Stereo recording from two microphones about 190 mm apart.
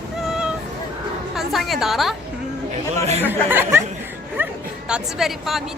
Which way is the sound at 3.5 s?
10° right (ahead or behind).